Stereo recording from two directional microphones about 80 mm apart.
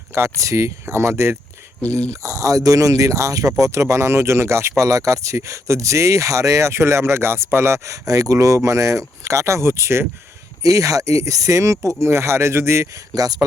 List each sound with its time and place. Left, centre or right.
0.1 s speech: right
8.0 s speech: right
10.6 s speech: right
13.1 s speech: right